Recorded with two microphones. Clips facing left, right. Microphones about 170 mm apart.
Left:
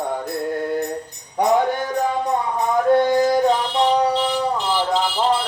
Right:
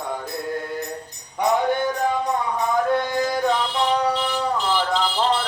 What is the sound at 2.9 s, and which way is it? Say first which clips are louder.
Music: left 6 dB; 35° left (ahead or behind).